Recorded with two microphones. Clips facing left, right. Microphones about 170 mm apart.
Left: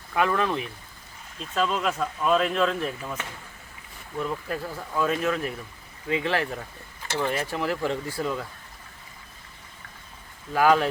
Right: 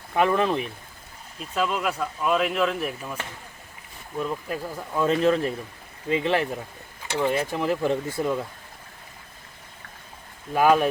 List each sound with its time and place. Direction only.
0.1 s speech: 20° right (ahead or behind)
1.4 s speech: 10° right (ahead or behind)
4.4 s speech: 15° right (ahead or behind)
5.0 s speech: 25° right (ahead or behind)
10.5 s speech: 15° right (ahead or behind)